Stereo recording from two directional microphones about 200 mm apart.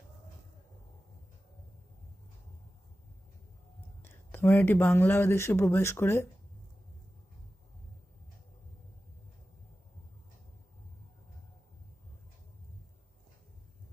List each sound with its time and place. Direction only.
4.0 s speech: 10° left (ahead or behind)